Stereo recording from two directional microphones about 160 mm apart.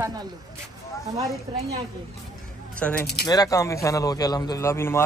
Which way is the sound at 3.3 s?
20° left (ahead or behind).